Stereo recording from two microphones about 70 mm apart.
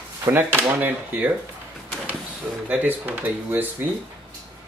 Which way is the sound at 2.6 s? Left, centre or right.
Right.